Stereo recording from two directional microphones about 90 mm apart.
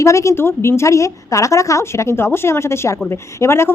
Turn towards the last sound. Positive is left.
turn(degrees=30)  # may be behind; listen again after turning